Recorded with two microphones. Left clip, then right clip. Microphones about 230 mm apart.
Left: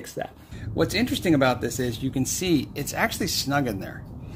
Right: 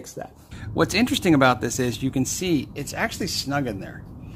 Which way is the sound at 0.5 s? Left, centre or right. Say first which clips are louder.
Right 3 dB; right.